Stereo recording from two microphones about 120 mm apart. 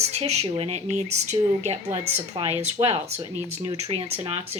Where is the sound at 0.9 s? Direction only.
70° right (ahead or behind).